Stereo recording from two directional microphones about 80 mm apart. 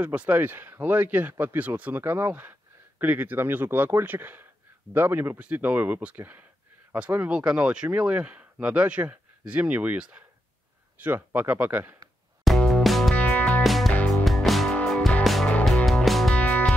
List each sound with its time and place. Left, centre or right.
0.0 s speech: centre
12.4 s music: centre
13.1 s music: centre
13.6 s music: centre
13.9 s music: centre
14.2 s music: centre
16.3 s music: centre